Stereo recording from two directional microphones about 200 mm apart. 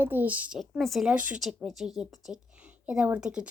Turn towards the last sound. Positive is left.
turn(degrees=-5)  # may be behind; listen again after turning